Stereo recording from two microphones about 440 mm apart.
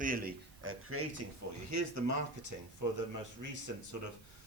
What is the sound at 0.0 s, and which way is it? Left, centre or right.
A man's voice, centre.